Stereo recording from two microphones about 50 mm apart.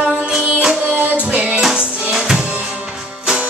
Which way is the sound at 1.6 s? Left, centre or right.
Centre.